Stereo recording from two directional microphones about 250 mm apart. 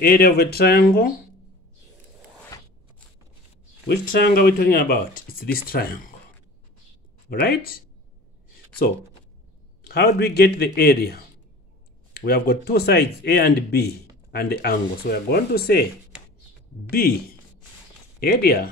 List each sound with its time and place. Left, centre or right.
0.0 s speech: left
3.8 s speech: left
7.2 s speech: left
9.8 s speech: left
18.2 s speech: left